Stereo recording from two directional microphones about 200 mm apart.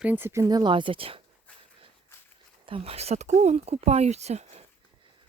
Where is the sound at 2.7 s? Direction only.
30° right (ahead or behind).